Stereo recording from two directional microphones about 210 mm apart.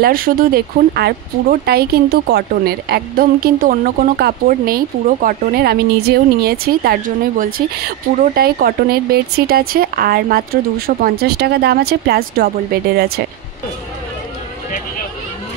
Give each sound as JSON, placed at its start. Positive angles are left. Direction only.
{"t": 0.0, "sound": "speech", "side_deg": -45}